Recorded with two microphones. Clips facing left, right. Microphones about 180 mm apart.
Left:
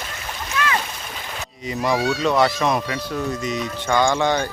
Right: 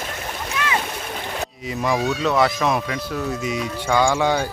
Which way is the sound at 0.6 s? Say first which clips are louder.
Left 3 dB; 15° right (ahead or behind).